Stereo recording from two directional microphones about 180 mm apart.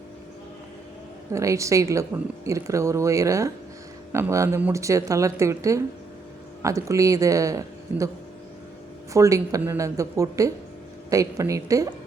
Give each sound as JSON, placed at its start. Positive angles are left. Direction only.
{"t": 1.3, "sound": "a woman's voice", "side_deg": -15}
{"t": 9.1, "sound": "a woman's voice", "side_deg": -20}